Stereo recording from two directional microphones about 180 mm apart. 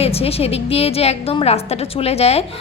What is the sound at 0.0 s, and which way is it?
A woman's voice, 35° left (ahead or behind).